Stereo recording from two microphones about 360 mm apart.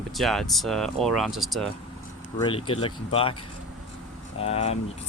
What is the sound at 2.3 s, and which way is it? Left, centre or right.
Speech, centre.